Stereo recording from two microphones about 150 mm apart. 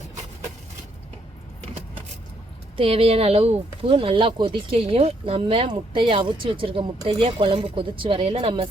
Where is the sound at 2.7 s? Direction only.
40° right (ahead or behind).